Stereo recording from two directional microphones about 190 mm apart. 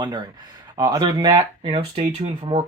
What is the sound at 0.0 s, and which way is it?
Speech, 20° right (ahead or behind).